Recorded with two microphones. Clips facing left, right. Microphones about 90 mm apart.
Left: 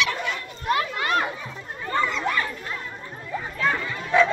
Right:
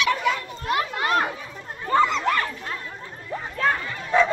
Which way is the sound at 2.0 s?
65° right (ahead or behind).